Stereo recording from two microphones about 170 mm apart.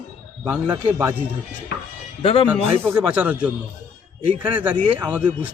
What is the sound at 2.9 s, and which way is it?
A man's voice, 5° right (ahead or behind).